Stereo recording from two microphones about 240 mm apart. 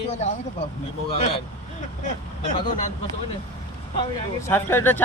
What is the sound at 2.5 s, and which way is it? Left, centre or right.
Speech, left.